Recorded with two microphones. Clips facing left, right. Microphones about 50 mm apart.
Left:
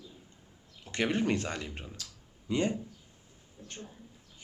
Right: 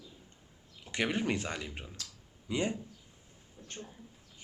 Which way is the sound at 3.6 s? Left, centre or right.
Right.